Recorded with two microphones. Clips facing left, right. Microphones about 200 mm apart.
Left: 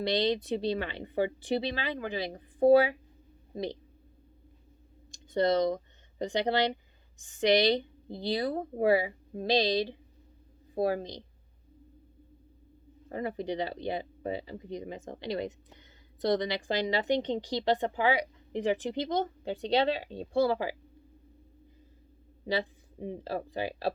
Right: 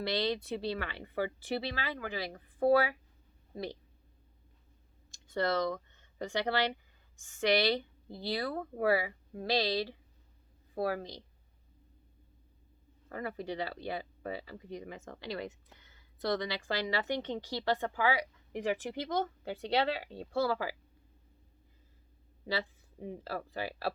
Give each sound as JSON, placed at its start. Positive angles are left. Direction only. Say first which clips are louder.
{"t": 0.0, "sound": "speech", "louder": "left 5 dB", "side_deg": 20}
{"t": 5.1, "sound": "a woman's voice", "louder": "left 6 dB", "side_deg": 20}
{"t": 13.1, "sound": "speech", "louder": "left 5 dB", "side_deg": 20}
{"t": 22.6, "sound": "speech", "louder": "left 4 dB", "side_deg": 25}